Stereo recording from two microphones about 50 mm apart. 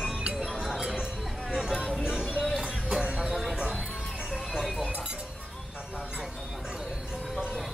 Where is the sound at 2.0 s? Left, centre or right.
Centre.